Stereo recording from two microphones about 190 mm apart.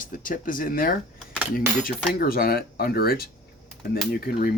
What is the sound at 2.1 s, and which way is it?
Speech, 50° left (ahead or behind).